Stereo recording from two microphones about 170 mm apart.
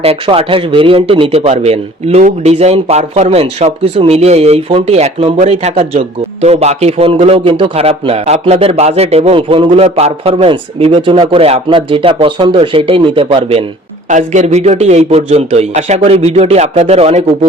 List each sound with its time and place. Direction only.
0.0 s speech: 35° right (ahead or behind)
14.1 s speech: 45° right (ahead or behind)